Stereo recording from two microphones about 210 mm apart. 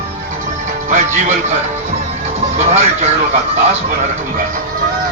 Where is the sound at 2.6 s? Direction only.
30° right (ahead or behind).